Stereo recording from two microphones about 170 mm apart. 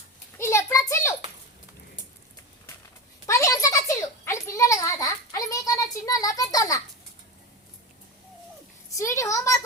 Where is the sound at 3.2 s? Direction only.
20° left (ahead or behind).